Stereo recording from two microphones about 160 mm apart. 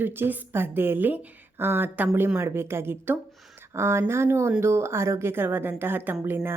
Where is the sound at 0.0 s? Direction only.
10° right (ahead or behind).